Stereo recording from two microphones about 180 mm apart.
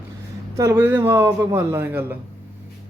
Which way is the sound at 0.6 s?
15° right (ahead or behind).